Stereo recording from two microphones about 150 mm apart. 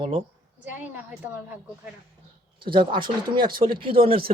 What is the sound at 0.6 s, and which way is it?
A woman's voice, 10° right (ahead or behind).